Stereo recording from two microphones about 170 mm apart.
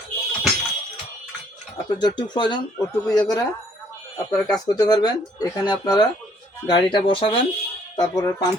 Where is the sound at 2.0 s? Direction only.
25° left (ahead or behind).